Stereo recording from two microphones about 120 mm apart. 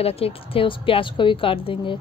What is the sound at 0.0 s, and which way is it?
A woman's voice, 55° left (ahead or behind).